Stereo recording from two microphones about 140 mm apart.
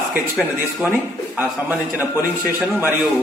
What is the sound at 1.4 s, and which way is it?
A man's voice, 10° right (ahead or behind).